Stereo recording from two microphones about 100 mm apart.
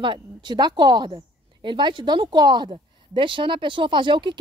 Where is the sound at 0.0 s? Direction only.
50° right (ahead or behind).